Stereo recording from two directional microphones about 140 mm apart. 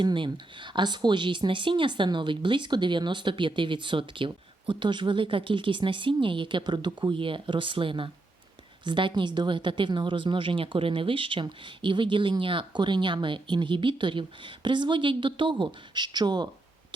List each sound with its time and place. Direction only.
0.0 s speech: 35° right (ahead or behind)